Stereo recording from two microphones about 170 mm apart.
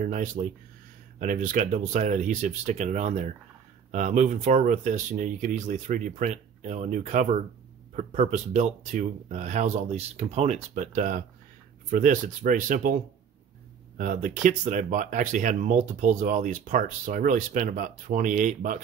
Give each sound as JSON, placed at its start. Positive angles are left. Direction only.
{"t": 0.0, "sound": "speech", "side_deg": -50}